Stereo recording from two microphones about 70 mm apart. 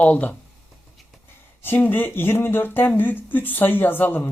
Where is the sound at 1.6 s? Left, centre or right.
Left.